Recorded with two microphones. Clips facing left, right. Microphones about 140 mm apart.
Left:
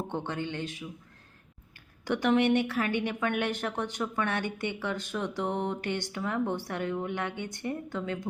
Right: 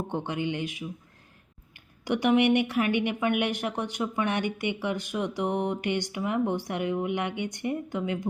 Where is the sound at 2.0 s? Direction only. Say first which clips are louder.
Right 2 dB; 15° right (ahead or behind).